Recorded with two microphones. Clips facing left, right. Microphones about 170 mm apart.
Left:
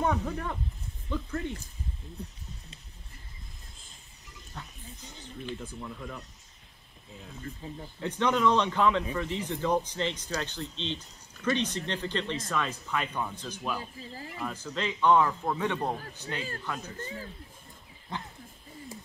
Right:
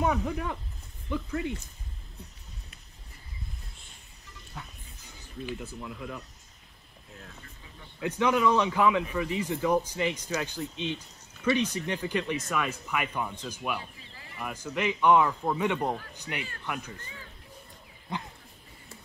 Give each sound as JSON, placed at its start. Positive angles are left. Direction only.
{"t": 0.0, "sound": "speech", "side_deg": -10}
{"t": 4.6, "sound": "music", "side_deg": -5}
{"t": 5.5, "sound": "speech", "side_deg": -5}
{"t": 8.0, "sound": "speech", "side_deg": -10}
{"t": 13.7, "sound": "speech", "side_deg": 40}
{"t": 14.4, "sound": "speech", "side_deg": -10}
{"t": 17.0, "sound": "speech", "side_deg": 40}